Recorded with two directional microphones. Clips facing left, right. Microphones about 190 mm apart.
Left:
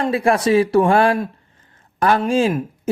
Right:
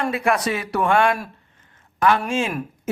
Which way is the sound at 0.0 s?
30° left (ahead or behind).